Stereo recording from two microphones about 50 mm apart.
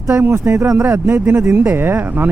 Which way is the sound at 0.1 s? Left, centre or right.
Right.